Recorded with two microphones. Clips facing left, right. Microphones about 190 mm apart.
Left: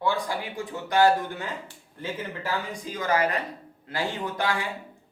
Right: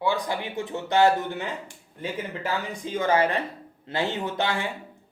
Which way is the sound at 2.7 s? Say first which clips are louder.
Right 5 dB; 25° right (ahead or behind).